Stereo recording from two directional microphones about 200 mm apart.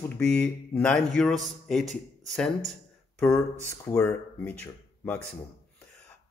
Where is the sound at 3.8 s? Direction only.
10° left (ahead or behind).